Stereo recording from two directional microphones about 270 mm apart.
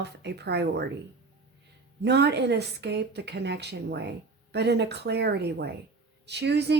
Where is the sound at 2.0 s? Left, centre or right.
Right.